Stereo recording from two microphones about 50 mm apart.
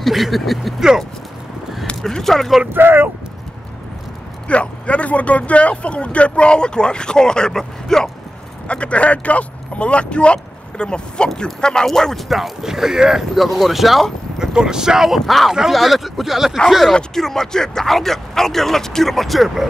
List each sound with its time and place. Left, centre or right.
0.0 s speech: centre
2.1 s speech: centre
2.7 s speech: right
4.5 s speech: left
8.6 s speech: left; by 13.2 s centre
13.3 s speech: centre
14.4 s speech: centre
16.9 s speech: centre